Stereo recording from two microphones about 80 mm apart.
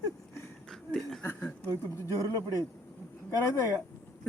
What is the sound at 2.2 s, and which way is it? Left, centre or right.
Speech, left.